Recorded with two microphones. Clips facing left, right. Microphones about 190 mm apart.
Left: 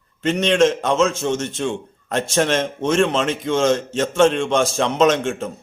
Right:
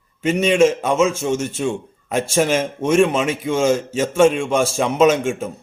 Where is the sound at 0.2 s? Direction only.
5° right (ahead or behind).